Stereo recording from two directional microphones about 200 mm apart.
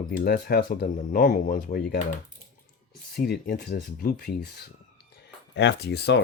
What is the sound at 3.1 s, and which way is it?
Speech, 55° left (ahead or behind).